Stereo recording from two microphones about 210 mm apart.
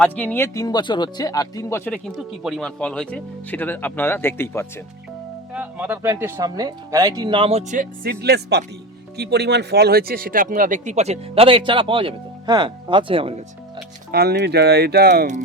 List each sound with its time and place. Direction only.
0.0 s speech: 5° left (ahead or behind)
2.1 s speech: centre (ahead or behind)
5.5 s speech: 5° right (ahead or behind); by 13.4 s 25° right (ahead or behind)
14.1 s speech: 50° right (ahead or behind)